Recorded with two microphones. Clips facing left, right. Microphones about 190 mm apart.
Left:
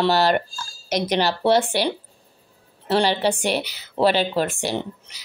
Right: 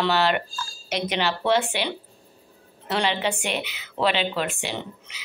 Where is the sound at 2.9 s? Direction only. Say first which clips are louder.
Left 5 dB; 35° left (ahead or behind).